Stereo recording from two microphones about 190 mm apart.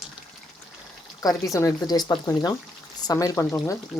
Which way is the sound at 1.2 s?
20° left (ahead or behind).